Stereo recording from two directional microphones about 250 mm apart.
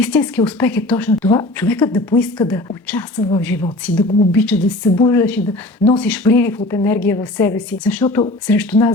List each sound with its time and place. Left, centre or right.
0.0 s a woman's voice: centre